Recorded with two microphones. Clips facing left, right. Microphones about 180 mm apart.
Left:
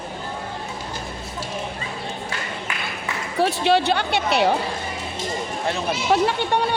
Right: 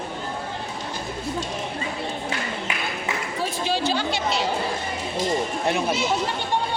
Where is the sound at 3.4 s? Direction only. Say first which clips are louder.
Left 9 dB; 65° left (ahead or behind).